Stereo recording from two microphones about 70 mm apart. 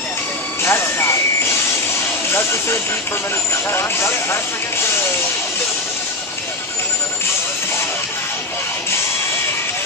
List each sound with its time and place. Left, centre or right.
0.6 s vehicle: left
3.7 s speech: left